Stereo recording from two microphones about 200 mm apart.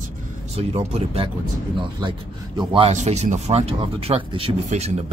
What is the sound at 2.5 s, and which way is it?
Speech, 30° right (ahead or behind).